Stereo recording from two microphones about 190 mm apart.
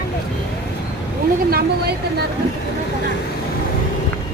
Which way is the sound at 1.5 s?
55° right (ahead or behind).